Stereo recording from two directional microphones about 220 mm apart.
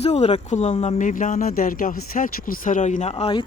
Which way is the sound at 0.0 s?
30° left (ahead or behind).